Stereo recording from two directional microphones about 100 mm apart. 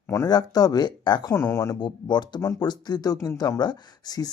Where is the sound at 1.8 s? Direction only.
45° left (ahead or behind).